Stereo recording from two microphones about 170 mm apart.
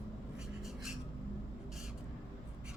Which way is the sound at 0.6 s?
Centre (ahead or behind).